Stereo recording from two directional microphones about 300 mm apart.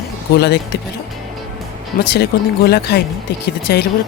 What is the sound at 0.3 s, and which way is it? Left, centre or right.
Speech, left.